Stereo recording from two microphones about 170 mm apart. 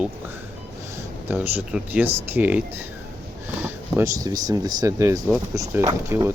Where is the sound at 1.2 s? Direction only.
10° right (ahead or behind).